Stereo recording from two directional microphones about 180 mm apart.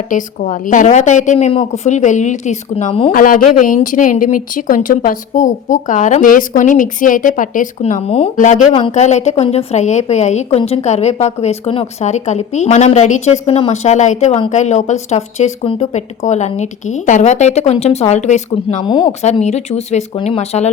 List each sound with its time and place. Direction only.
0.1 s speech: 45° left (ahead or behind)
3.1 s speech: 50° left (ahead or behind)
10.6 s a woman's voice: 25° left (ahead or behind)
10.8 s speech: 40° left (ahead or behind)
18.9 s a woman's voice: 25° left (ahead or behind)
19.2 s speech: 40° left (ahead or behind)